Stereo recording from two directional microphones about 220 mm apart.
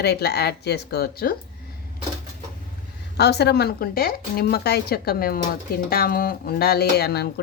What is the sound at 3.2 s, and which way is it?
Speech, 50° left (ahead or behind).